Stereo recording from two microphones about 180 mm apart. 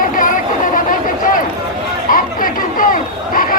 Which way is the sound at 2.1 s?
50° left (ahead or behind).